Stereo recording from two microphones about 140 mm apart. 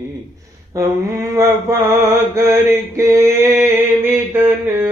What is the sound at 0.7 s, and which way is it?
Mantra, 20° right (ahead or behind).